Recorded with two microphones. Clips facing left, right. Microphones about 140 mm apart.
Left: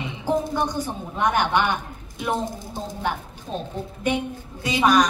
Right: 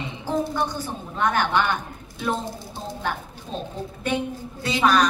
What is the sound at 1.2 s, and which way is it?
Speech, 15° left (ahead or behind).